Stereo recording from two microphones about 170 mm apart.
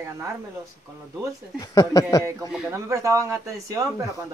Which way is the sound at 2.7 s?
20° right (ahead or behind).